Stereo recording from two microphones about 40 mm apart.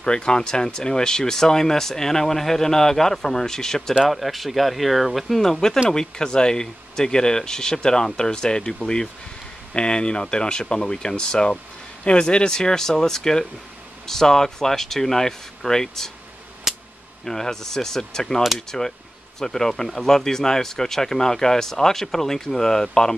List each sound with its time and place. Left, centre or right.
0.0 s speech: left
4.1 s speech: centre
5.4 s speech: centre
17.2 s speech: centre